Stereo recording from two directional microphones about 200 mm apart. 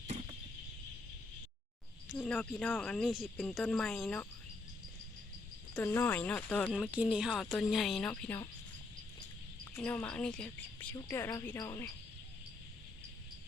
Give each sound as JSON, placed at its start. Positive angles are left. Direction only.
{"t": 2.1, "sound": "speech", "side_deg": 5}
{"t": 5.7, "sound": "a woman's voice", "side_deg": 10}
{"t": 6.7, "sound": "speech", "side_deg": -5}
{"t": 9.7, "sound": "a woman's voice", "side_deg": 10}
{"t": 10.9, "sound": "a woman's voice", "side_deg": 15}